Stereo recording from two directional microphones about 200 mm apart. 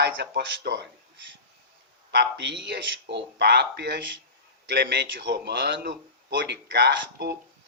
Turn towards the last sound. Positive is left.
turn(degrees=-55)  # may be behind; listen again after turning